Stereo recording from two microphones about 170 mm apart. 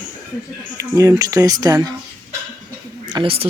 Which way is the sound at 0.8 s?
20° right (ahead or behind).